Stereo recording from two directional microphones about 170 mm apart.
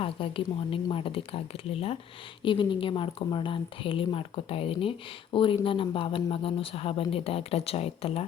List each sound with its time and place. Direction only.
0.0 s a woman's voice: 30° left (ahead or behind)